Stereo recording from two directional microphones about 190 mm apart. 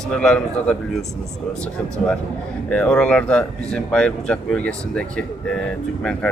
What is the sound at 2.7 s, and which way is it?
Speech, 5° left (ahead or behind).